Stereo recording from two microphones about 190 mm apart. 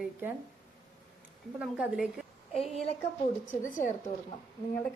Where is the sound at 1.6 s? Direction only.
5° right (ahead or behind).